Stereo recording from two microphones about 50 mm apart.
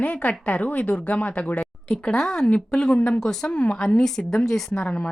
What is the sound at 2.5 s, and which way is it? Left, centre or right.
Speech, centre.